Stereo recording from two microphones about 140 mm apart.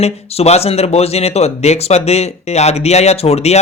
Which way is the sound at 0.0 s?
50° left (ahead or behind).